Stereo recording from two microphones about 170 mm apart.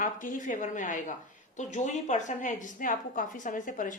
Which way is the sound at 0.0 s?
50° left (ahead or behind).